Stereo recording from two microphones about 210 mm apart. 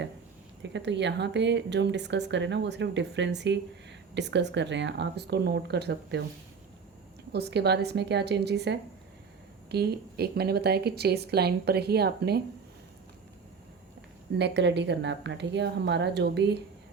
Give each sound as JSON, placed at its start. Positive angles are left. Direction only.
{"t": 0.6, "sound": "speech", "side_deg": -55}
{"t": 7.3, "sound": "a woman's voice", "side_deg": -50}
{"t": 14.3, "sound": "speech", "side_deg": -55}